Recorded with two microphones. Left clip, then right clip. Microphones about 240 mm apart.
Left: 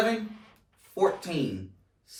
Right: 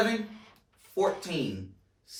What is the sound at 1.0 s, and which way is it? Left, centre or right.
Speech, centre.